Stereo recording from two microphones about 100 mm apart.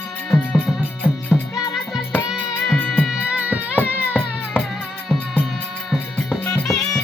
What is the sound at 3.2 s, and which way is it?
Music, 15° right (ahead or behind).